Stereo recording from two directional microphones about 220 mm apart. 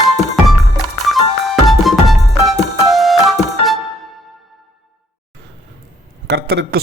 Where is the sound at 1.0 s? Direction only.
Centre (ahead or behind).